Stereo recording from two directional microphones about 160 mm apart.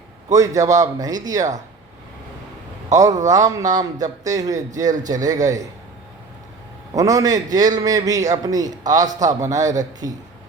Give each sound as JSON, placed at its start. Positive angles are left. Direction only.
{"t": 0.3, "sound": "a man's voice", "side_deg": -20}
{"t": 2.9, "sound": "a man's voice", "side_deg": -20}
{"t": 6.9, "sound": "a man's voice", "side_deg": -20}